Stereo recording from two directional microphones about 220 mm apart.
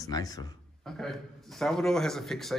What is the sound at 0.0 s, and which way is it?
Speech, 15° left (ahead or behind).